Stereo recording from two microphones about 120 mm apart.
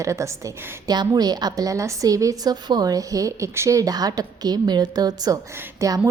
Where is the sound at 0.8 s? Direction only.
35° right (ahead or behind).